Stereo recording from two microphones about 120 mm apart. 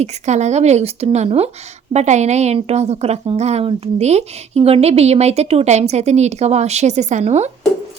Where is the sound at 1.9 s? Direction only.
75° right (ahead or behind).